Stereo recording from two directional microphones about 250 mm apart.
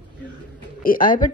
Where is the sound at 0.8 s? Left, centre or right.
Left.